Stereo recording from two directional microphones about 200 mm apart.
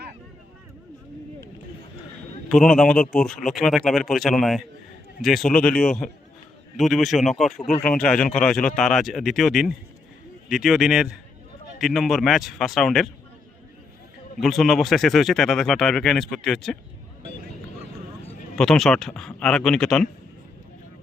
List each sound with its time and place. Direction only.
2.5 s speech: centre (ahead or behind)
7.6 s speech: 35° left (ahead or behind)
7.9 s speech: 5° left (ahead or behind)
14.4 s speech: centre (ahead or behind)
18.5 s speech: centre (ahead or behind)